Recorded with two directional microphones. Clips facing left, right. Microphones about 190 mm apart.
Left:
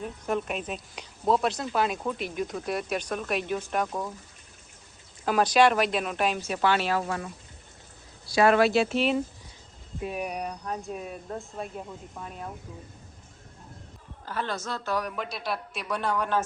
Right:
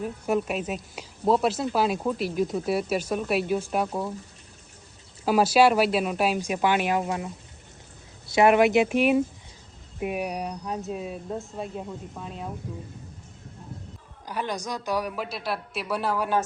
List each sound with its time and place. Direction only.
0.0 s a woman's voice: 5° right (ahead or behind)
5.2 s a woman's voice: 5° right (ahead or behind)
8.3 s a woman's voice: 20° right (ahead or behind)
10.2 s a woman's voice: centre (ahead or behind)
14.3 s a woman's voice: 15° right (ahead or behind)